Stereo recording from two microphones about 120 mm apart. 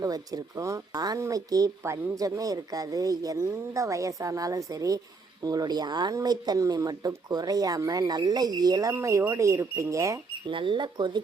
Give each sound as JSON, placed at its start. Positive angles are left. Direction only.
{"t": 0.0, "sound": "speech", "side_deg": -30}
{"t": 10.5, "sound": "speech", "side_deg": -45}